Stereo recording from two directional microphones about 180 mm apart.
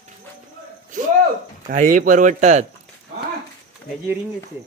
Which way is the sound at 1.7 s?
50° right (ahead or behind).